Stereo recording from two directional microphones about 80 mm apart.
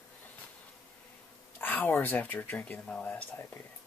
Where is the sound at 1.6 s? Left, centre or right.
Left.